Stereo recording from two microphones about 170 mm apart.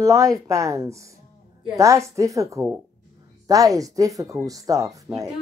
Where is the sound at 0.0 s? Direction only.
20° right (ahead or behind).